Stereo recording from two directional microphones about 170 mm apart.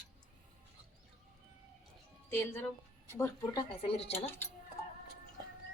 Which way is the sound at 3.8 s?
35° left (ahead or behind).